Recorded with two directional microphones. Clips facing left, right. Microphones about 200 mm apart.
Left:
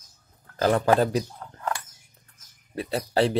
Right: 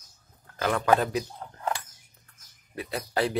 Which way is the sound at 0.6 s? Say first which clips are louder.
Left 3 dB; 30° left (ahead or behind).